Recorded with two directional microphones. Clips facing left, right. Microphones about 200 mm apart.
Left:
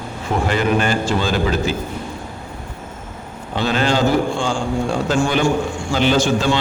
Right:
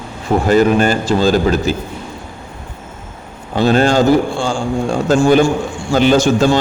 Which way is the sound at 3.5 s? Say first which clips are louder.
Right 6 dB; 45° right (ahead or behind).